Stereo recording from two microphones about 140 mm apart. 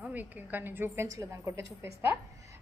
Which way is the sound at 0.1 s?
10° right (ahead or behind).